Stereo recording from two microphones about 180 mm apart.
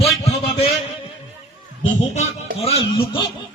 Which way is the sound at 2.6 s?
30° left (ahead or behind).